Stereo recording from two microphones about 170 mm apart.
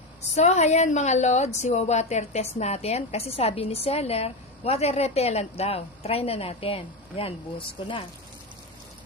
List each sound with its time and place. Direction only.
0.3 s a woman's voice: 40° left (ahead or behind)